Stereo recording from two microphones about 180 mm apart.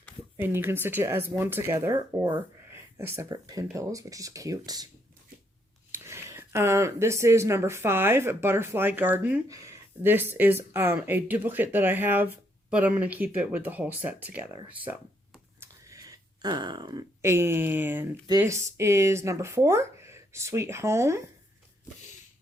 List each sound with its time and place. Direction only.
0.3 s speech: 10° right (ahead or behind)
5.9 s speech: 15° right (ahead or behind)
14.8 s a sound: 10° right (ahead or behind)
18.3 s speech: 15° right (ahead or behind)